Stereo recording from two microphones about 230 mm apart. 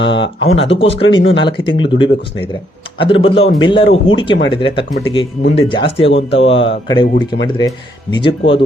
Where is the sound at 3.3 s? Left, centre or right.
Left.